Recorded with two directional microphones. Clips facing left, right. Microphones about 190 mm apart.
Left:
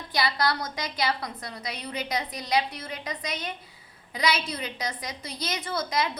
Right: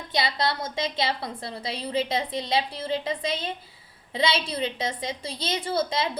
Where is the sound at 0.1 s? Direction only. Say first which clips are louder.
Even; 25° right (ahead or behind).